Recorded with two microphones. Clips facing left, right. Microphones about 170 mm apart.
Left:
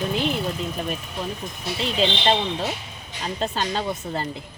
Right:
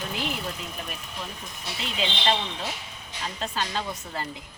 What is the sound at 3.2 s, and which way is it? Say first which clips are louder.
Speech: left 5 dB; 35° left (ahead or behind).